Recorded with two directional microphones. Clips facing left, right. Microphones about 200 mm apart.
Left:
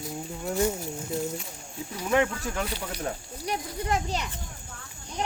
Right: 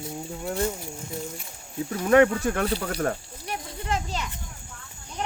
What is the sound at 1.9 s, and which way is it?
Speech, 60° right (ahead or behind).